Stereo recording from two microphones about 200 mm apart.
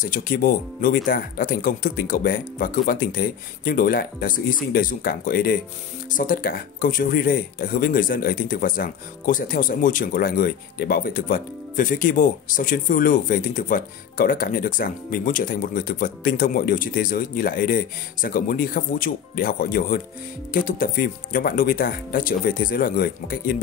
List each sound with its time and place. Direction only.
0.0 s speech: 45° left (ahead or behind)